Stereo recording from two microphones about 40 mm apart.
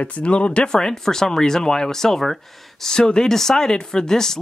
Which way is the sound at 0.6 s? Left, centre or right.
Centre.